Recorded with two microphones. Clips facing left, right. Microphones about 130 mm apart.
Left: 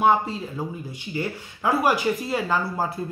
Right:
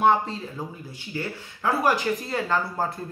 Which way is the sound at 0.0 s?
5° left (ahead or behind).